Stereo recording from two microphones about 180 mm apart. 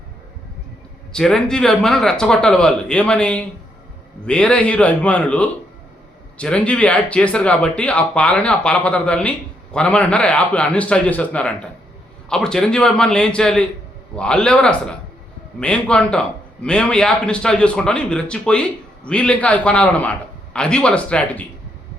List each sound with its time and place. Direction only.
1.1 s a man's voice: 5° left (ahead or behind)